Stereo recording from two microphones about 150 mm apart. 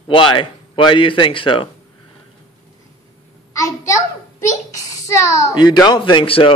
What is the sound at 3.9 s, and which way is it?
A child's voice, 20° left (ahead or behind).